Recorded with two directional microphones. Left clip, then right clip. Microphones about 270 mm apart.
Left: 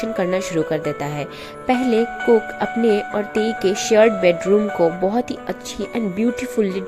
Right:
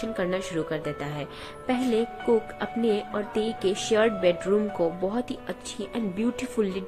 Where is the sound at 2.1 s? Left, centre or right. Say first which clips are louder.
Left 9 dB; left.